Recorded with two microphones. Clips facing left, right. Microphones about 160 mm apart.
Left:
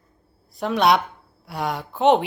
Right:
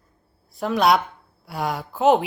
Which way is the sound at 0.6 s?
Centre (ahead or behind).